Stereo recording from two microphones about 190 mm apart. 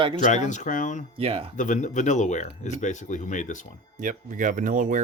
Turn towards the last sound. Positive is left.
turn(degrees=-45)  # may be behind; listen again after turning